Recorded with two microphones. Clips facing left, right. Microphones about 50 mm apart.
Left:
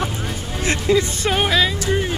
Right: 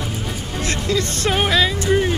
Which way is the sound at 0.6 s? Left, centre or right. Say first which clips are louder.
Left 4 dB; centre.